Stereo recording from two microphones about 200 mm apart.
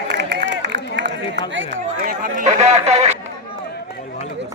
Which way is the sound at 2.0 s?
45° right (ahead or behind).